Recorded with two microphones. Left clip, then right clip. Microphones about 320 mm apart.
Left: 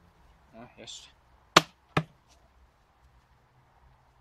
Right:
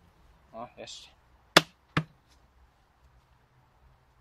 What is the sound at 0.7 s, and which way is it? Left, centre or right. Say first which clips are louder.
Speech: right 1 dB; centre.